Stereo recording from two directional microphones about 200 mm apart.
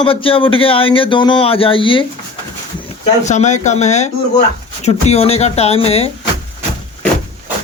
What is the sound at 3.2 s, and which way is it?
Speech, 35° left (ahead or behind).